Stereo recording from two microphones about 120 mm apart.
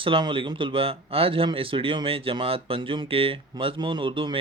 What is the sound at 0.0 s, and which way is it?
A man's voice, 45° right (ahead or behind).